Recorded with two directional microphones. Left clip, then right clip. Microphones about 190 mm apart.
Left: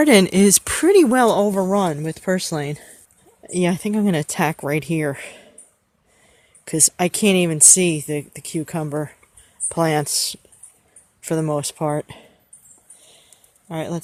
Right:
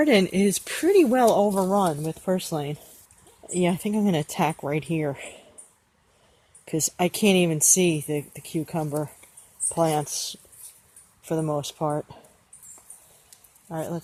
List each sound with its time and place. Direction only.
0.0 s speech: 35° left (ahead or behind)
3.4 s speech: 20° left (ahead or behind)
6.7 s speech: 25° left (ahead or behind)
9.6 s speech: 35° left (ahead or behind)
13.7 s speech: 35° left (ahead or behind)